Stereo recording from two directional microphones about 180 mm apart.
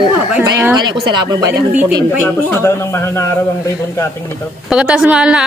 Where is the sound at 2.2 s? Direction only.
10° left (ahead or behind).